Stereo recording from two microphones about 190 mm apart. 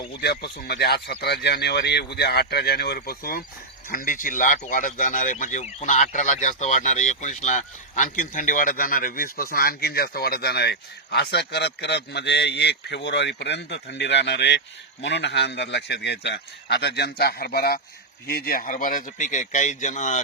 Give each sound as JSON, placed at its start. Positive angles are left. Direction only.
{"t": 0.2, "sound": "a man's voice", "side_deg": 60}